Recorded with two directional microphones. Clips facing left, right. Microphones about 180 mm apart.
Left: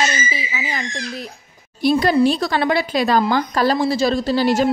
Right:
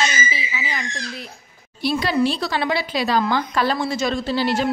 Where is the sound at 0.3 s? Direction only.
45° left (ahead or behind).